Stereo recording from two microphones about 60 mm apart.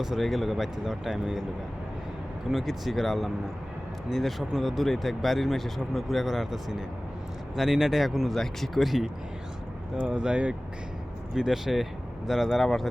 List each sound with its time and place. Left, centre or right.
0.0 s speech: centre
2.5 s speech: centre
10.1 s speech: centre
11.3 s speech: centre